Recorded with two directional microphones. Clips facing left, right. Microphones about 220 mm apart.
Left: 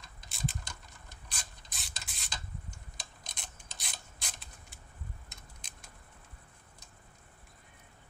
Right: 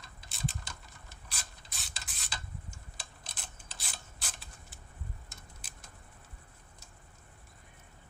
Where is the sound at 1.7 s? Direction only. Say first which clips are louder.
Even; centre (ahead or behind).